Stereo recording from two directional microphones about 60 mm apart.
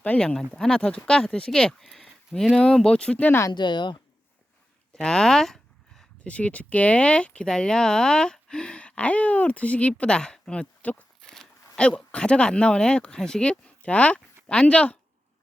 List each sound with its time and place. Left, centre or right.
0.0 s speech: left
4.9 s speech: centre
6.2 s speech: left